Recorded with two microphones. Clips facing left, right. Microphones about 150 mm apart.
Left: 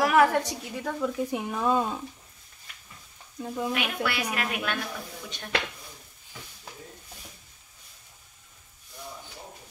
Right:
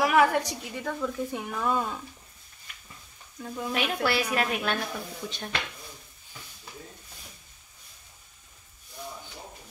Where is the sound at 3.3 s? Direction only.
20° left (ahead or behind).